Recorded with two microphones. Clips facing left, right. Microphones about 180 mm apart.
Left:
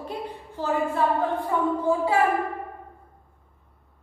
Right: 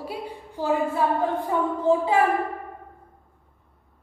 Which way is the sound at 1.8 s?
20° right (ahead or behind).